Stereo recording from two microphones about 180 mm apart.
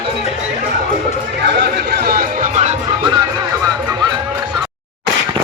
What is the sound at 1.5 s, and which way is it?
Music, 70° right (ahead or behind).